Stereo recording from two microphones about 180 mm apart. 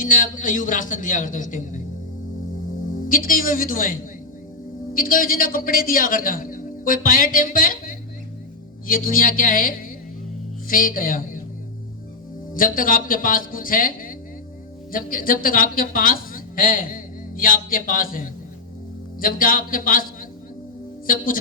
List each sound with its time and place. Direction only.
0.0 s a man's voice: 45° left (ahead or behind)
3.1 s a man's voice: 50° left (ahead or behind)
4.9 s a man's voice: 50° left (ahead or behind)
12.5 s a man's voice: 50° left (ahead or behind)